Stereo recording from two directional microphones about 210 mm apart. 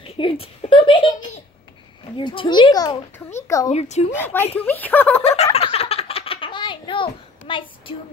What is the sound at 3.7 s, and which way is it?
Speech, 30° left (ahead or behind).